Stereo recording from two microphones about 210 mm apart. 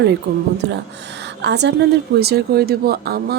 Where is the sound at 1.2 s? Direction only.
55° right (ahead or behind).